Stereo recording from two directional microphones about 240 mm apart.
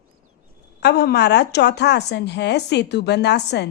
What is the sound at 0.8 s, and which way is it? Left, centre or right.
Speech, left.